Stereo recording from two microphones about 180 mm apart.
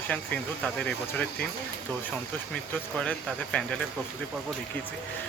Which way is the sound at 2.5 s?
5° left (ahead or behind).